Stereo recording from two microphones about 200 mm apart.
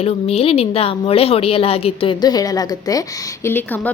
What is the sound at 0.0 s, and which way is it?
A woman's voice, 30° left (ahead or behind).